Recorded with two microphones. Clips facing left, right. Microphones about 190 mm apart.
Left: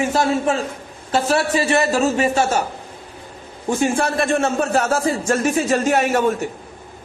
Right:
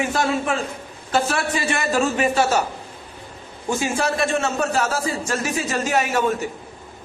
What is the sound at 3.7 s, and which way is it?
A man's voice, 55° left (ahead or behind).